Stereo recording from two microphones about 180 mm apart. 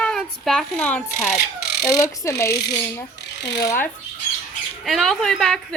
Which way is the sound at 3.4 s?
75° left (ahead or behind).